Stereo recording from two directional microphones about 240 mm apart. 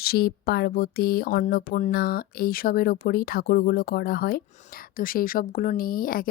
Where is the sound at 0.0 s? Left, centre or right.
Left.